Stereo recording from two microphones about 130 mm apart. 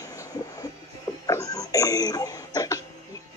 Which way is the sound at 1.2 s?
25° left (ahead or behind).